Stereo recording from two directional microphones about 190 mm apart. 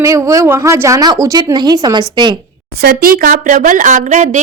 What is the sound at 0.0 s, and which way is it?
A woman's voice, 15° right (ahead or behind).